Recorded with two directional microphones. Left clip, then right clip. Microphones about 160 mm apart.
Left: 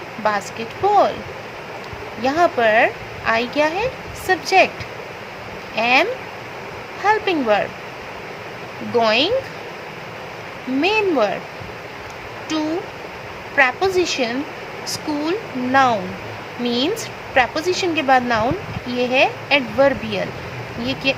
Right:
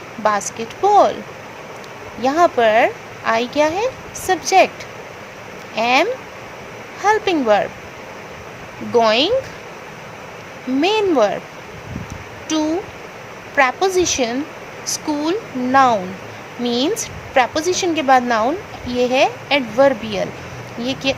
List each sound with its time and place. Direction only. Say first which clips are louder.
0.2 s a woman's voice: right 3 dB; 35° right (ahead or behind)
2.2 s a woman's voice: right 2 dB; 30° right (ahead or behind)
5.7 s a woman's voice: right 1 dB; 35° right (ahead or behind)
8.9 s a woman's voice: right 2 dB; 30° right (ahead or behind)
10.8 s a woman's voice: right 2 dB; 35° right (ahead or behind)
13.6 s a woman's voice: right 1 dB; 30° right (ahead or behind)